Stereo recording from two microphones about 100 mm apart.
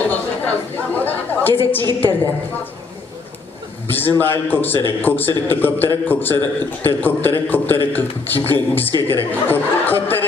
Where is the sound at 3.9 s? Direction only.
20° left (ahead or behind).